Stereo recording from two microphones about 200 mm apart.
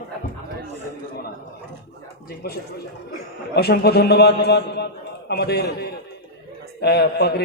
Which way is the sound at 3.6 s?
55° left (ahead or behind).